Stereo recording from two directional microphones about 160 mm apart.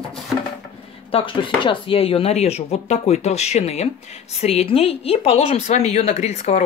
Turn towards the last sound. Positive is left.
turn(degrees=45)  # may be behind; listen again after turning